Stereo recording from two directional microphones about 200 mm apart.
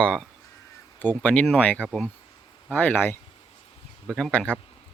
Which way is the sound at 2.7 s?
10° left (ahead or behind).